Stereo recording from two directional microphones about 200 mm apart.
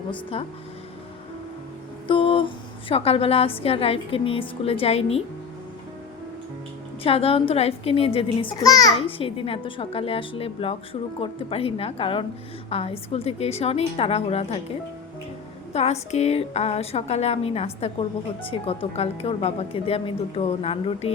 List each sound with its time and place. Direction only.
0.1 s a child's voice: 25° left (ahead or behind)
2.0 s a sound: 25° left (ahead or behind)
2.9 s a child's voice: 30° left (ahead or behind)
7.0 s a child's voice: 30° left (ahead or behind)
15.7 s a woman's voice: 30° left (ahead or behind)